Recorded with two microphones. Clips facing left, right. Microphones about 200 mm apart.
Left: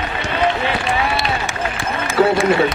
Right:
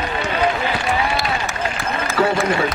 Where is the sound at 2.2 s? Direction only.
25° left (ahead or behind).